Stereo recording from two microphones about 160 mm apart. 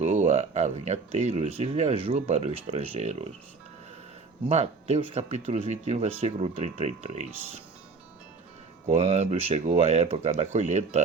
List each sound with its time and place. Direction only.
0.0 s speech: 45° right (ahead or behind)
4.4 s speech: 40° right (ahead or behind)
8.9 s speech: 45° right (ahead or behind)